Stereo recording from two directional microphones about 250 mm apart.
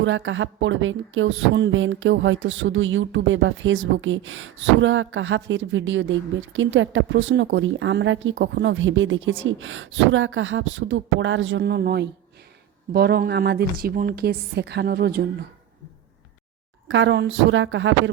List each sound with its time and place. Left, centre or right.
0.0 s a woman's voice: right
16.9 s speech: right